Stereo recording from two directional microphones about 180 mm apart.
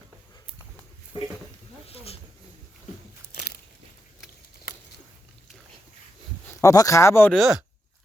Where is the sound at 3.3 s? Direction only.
60° left (ahead or behind).